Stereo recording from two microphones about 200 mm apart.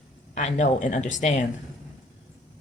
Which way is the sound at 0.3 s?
35° left (ahead or behind).